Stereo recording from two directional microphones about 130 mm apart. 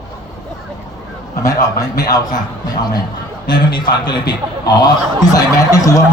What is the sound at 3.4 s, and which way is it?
A man's voice, 35° left (ahead or behind).